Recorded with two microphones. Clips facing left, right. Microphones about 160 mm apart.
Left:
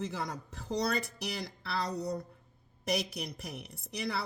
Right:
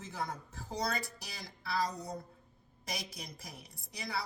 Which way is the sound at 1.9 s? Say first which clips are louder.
Left 7 dB; 70° left (ahead or behind).